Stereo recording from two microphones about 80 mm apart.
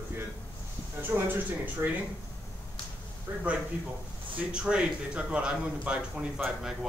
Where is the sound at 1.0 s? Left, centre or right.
Right.